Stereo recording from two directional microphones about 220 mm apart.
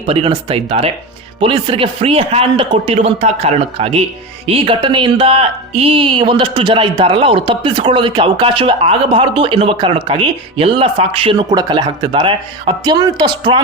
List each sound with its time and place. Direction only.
0.1 s speech: 25° right (ahead or behind)